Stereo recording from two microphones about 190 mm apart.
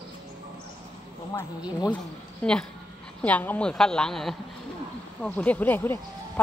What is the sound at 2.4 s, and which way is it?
A woman's voice, 5° left (ahead or behind).